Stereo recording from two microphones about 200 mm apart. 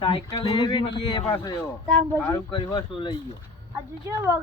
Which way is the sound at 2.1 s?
15° left (ahead or behind).